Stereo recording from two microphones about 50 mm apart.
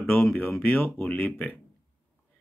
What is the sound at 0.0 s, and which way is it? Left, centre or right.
Speech, left.